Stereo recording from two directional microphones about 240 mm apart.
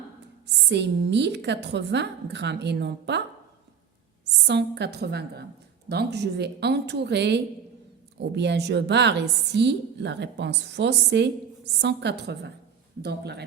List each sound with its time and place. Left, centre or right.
0.4 s a woman's voice: right
4.4 s a woman's voice: right